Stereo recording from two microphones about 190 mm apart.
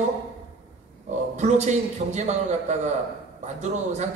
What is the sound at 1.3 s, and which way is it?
A man's voice, 40° right (ahead or behind).